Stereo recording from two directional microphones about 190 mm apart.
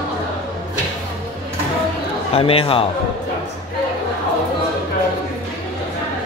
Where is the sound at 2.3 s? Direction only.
30° left (ahead or behind).